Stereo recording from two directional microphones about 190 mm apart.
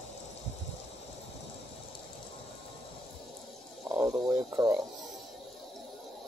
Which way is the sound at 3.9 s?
20° right (ahead or behind).